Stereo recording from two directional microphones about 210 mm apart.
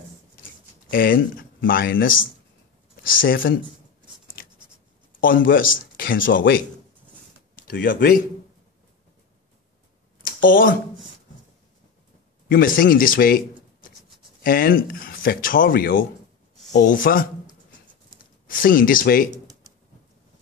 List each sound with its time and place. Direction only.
0.8 s speech: 45° left (ahead or behind)
5.2 s speech: 40° left (ahead or behind)
7.5 s speech: 40° left (ahead or behind)
10.4 s speech: 40° left (ahead or behind)
12.4 s speech: 40° left (ahead or behind)
14.4 s speech: 45° left (ahead or behind)